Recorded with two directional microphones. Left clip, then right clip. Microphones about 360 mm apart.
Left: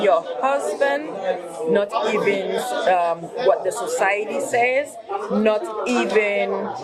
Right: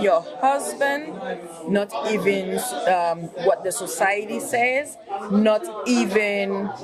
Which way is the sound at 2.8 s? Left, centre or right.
Right.